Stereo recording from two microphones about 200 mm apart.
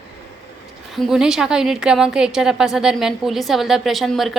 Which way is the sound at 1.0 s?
5° right (ahead or behind).